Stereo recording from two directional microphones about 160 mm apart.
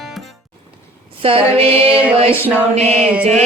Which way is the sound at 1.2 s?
35° right (ahead or behind).